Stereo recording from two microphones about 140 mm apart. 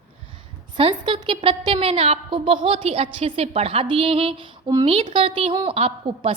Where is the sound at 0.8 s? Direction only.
35° right (ahead or behind).